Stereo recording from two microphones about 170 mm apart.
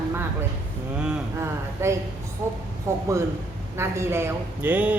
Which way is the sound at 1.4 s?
15° right (ahead or behind).